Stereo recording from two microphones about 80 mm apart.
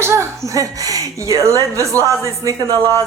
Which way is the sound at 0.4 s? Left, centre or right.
Right.